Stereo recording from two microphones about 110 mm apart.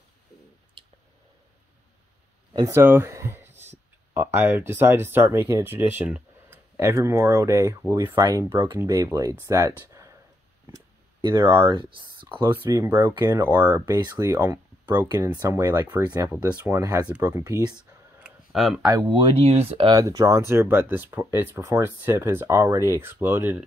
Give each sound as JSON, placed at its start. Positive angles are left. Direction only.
{"t": 2.5, "sound": "speech", "side_deg": -30}
{"t": 2.8, "sound": "speech", "side_deg": -20}
{"t": 8.2, "sound": "speech", "side_deg": -35}
{"t": 11.3, "sound": "speech", "side_deg": -20}
{"t": 11.7, "sound": "speech", "side_deg": -50}
{"t": 12.6, "sound": "speech", "side_deg": -25}
{"t": 14.2, "sound": "speech", "side_deg": -30}
{"t": 15.4, "sound": "speech", "side_deg": -25}
{"t": 18.2, "sound": "tick-tock", "side_deg": 0}
{"t": 19.0, "sound": "speech", "side_deg": -45}
{"t": 19.3, "sound": "speech", "side_deg": -65}
{"t": 19.9, "sound": "speech", "side_deg": -30}